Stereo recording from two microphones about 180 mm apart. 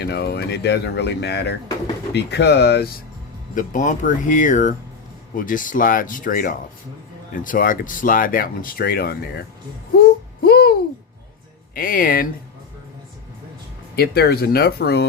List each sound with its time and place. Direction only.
0.0 s speech: 65° left (ahead or behind)
3.5 s speech: 45° left (ahead or behind)
10.0 s a sound: 60° left (ahead or behind)
11.7 s speech: 55° left (ahead or behind)
13.9 s speech: 60° left (ahead or behind)